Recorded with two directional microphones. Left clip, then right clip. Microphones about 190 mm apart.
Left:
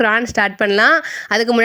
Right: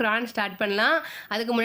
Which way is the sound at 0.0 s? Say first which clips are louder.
Left 10 dB; 30° left (ahead or behind).